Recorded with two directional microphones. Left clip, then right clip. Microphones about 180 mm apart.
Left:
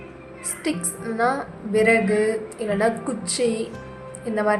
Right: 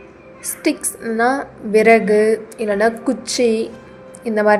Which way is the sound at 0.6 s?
30° right (ahead or behind).